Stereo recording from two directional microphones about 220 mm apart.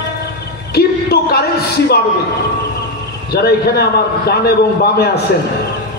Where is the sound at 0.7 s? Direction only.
45° left (ahead or behind).